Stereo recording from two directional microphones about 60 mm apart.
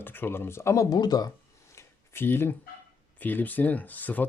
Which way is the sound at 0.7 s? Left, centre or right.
Left.